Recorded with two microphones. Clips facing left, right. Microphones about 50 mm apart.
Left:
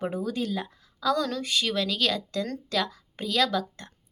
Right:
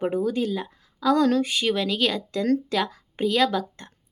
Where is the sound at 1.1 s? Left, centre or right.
Right.